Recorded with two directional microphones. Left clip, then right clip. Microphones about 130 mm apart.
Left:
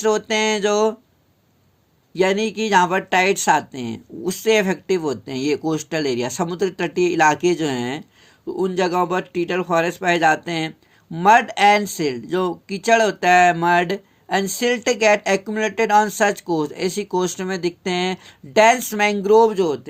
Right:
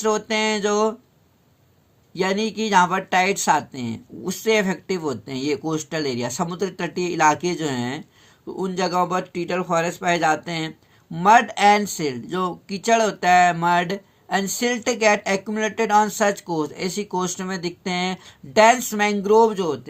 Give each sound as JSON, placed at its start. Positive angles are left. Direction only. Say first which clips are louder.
{"t": 0.0, "sound": "speech", "louder": "left 2 dB", "side_deg": 55}
{"t": 2.1, "sound": "speech", "louder": "left 4 dB", "side_deg": 60}